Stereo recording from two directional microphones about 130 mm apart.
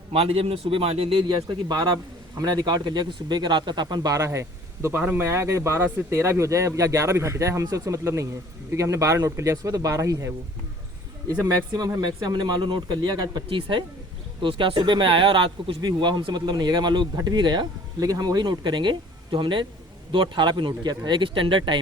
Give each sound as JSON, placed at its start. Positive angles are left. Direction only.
{"t": 0.1, "sound": "a man's voice", "side_deg": -45}
{"t": 11.8, "sound": "speech", "side_deg": -30}